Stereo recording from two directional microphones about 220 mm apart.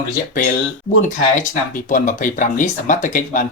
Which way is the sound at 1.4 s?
35° left (ahead or behind).